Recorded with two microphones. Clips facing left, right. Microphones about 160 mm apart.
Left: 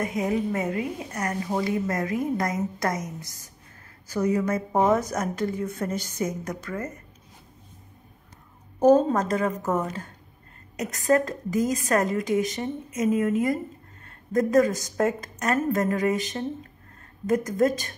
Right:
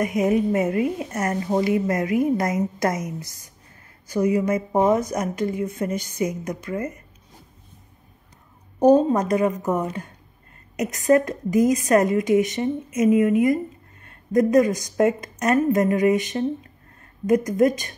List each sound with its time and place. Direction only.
0.0 s a woman's voice: 20° right (ahead or behind)
4.1 s a woman's voice: 10° right (ahead or behind)
8.7 s a woman's voice: 15° right (ahead or behind)